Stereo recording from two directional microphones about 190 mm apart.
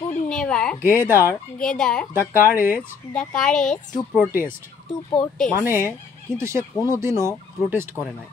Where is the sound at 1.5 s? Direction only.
5° left (ahead or behind).